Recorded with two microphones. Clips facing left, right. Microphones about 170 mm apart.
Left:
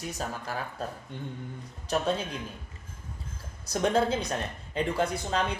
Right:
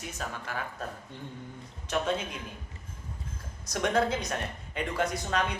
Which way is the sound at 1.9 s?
35° left (ahead or behind).